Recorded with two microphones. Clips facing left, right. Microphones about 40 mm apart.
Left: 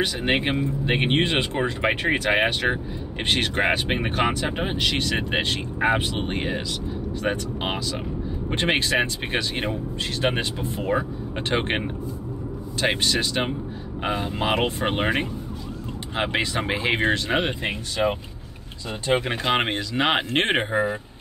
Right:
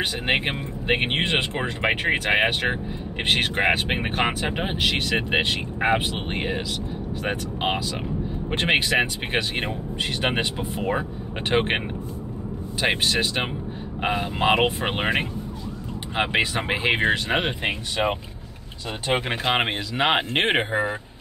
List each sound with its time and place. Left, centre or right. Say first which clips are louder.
0.0 s speech: left 1 dB; centre
1.2 s speech: even; right
1.5 s speech: left 1 dB; centre
12.8 s speech: right 1 dB; right
16.5 s speech: even; right
16.8 s speech: right 1 dB; right
19.2 s speech: even; centre
20.7 s speech: left 1 dB; right